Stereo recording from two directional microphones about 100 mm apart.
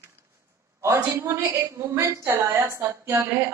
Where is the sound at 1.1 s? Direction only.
25° right (ahead or behind).